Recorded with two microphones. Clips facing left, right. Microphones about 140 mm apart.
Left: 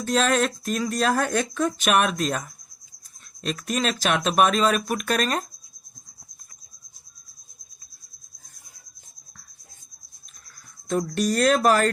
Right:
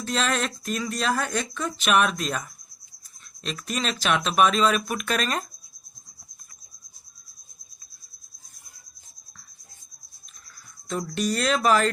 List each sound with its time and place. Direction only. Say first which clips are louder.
0.0 s speech: left 5 dB; 45° left (ahead or behind)
3.4 s speech: left 4 dB; 45° left (ahead or behind)
10.8 s speech: left 3 dB; 45° left (ahead or behind)